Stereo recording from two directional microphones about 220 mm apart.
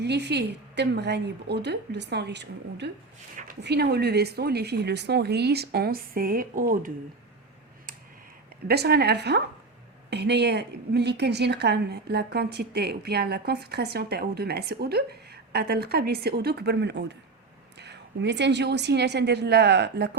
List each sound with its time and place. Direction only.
0.0 s a woman's voice: 50° right (ahead or behind)
8.6 s a woman's voice: 45° right (ahead or behind)